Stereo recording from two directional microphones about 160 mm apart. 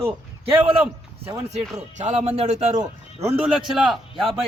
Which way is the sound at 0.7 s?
10° right (ahead or behind).